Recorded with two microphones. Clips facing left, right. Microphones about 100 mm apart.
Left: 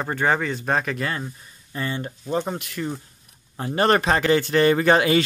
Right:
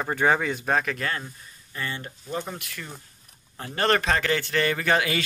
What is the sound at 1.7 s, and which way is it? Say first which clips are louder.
A man's voice: left 5 dB; 25° left (ahead or behind).